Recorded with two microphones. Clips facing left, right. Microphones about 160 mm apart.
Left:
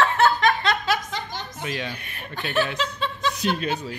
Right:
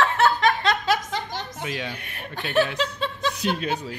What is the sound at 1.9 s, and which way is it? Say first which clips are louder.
Speech: even; 60° right (ahead or behind).